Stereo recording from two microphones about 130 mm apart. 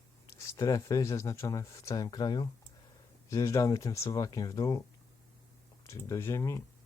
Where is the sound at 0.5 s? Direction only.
25° left (ahead or behind).